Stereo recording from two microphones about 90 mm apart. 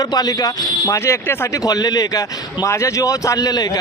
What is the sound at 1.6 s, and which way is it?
A man's voice, 45° left (ahead or behind).